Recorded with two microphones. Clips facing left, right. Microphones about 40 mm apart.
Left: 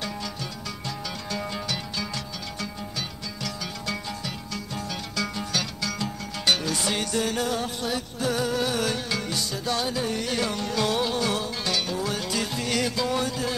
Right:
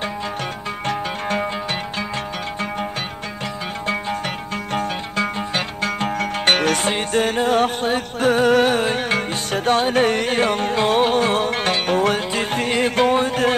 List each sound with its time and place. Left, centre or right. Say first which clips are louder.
0.8 s music: right 11 dB; right
4.7 s music: right 9 dB; right
6.9 s music: right 7 dB; right